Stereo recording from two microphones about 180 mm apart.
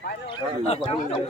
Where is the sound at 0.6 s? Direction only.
35° left (ahead or behind).